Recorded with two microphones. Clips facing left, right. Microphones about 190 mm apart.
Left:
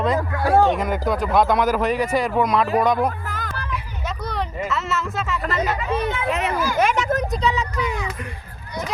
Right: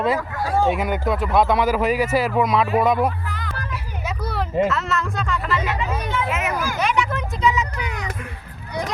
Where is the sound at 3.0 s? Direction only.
45° left (ahead or behind).